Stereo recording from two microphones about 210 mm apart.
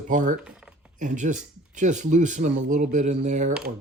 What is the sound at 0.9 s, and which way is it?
Speech, 35° right (ahead or behind).